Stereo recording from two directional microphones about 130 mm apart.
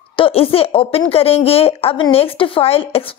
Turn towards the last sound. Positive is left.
turn(degrees=50)  # may be behind; listen again after turning